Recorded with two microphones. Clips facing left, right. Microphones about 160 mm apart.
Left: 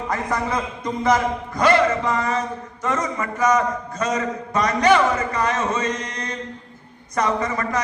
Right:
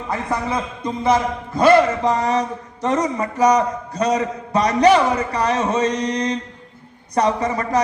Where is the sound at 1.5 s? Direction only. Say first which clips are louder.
Right 4 dB; 30° right (ahead or behind).